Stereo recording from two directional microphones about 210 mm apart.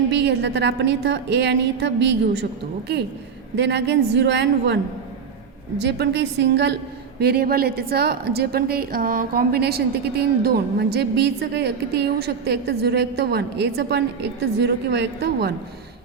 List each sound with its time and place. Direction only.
0.1 s a woman's voice: 55° right (ahead or behind)
5.8 s a woman's voice: 55° right (ahead or behind)